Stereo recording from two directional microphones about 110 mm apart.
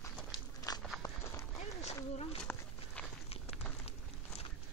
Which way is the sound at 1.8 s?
70° left (ahead or behind).